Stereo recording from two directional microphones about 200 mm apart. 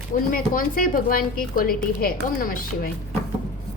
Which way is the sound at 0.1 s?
45° left (ahead or behind).